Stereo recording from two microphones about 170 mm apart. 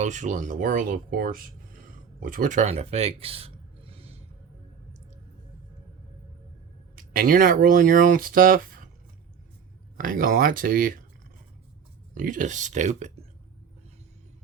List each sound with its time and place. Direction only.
0.0 s speech: 45° right (ahead or behind)
6.9 s speech: 55° right (ahead or behind)
10.0 s speech: 55° right (ahead or behind)
12.1 s speech: 50° right (ahead or behind)